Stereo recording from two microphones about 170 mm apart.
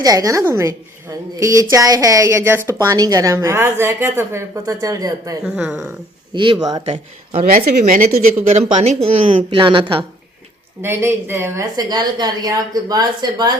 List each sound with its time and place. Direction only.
0.0 s a woman's voice: 20° right (ahead or behind)
5.4 s speech: 5° right (ahead or behind)
6.3 s a woman's voice: 30° right (ahead or behind)
6.8 s speech: 35° right (ahead or behind)
7.5 s a woman's voice: 50° right (ahead or behind); by 10.1 s 30° right (ahead or behind)
10.8 s a woman's voice: 15° right (ahead or behind)